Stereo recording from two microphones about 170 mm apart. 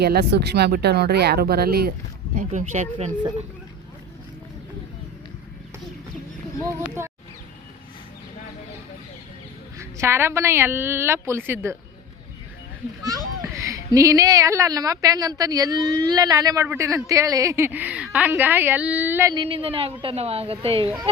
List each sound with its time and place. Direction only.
0.0 s speech: 70° right (ahead or behind)
2.3 s speech: 45° right (ahead or behind)
6.6 s a woman's voice: 15° right (ahead or behind)
9.7 s a woman's voice: 15° right (ahead or behind)
13.1 s a child's voice: 20° right (ahead or behind)
19.3 s a woman's voice: 30° right (ahead or behind)